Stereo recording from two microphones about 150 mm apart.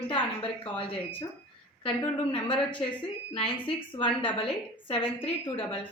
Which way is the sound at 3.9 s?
35° left (ahead or behind).